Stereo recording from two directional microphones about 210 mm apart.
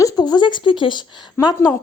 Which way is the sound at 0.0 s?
20° left (ahead or behind).